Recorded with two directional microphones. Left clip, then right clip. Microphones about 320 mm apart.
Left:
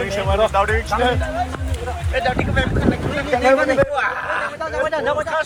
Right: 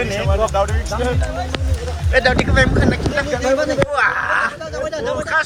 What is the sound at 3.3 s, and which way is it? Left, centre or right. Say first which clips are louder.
Speech: left 4 dB; left.